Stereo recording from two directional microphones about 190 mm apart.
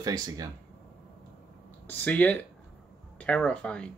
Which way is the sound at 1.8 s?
10° left (ahead or behind).